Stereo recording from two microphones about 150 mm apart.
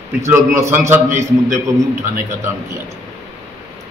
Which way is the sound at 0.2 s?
20° right (ahead or behind).